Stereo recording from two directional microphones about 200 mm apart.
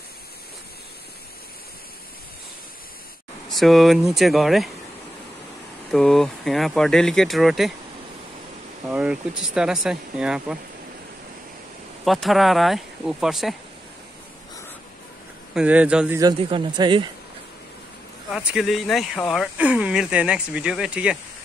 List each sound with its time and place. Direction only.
3.4 s speech: centre (ahead or behind)
5.9 s speech: centre (ahead or behind)
8.8 s speech: 5° right (ahead or behind)
12.0 s speech: centre (ahead or behind)
15.5 s speech: 5° right (ahead or behind)
16.2 s speech: 20° right (ahead or behind)
18.3 s speech: centre (ahead or behind)